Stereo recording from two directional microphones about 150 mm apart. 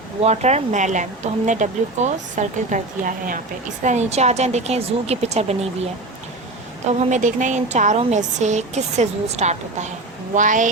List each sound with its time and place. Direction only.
0.2 s speech: 45° right (ahead or behind)
3.8 s a woman's voice: 50° right (ahead or behind)
6.8 s a woman's voice: 55° right (ahead or behind)